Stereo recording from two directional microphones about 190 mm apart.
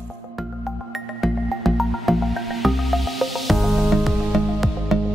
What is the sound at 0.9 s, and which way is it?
Music, centre (ahead or behind).